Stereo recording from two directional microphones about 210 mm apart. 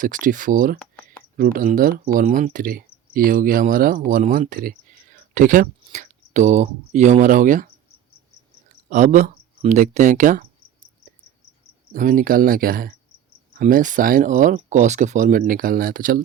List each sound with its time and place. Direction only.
0.0 s speech: 40° right (ahead or behind)
8.9 s speech: 35° right (ahead or behind)
11.9 s speech: 40° right (ahead or behind)